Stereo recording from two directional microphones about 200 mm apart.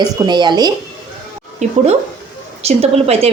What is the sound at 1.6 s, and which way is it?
A woman's voice, 35° right (ahead or behind).